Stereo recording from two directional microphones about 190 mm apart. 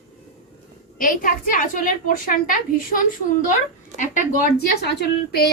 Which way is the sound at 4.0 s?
50° left (ahead or behind).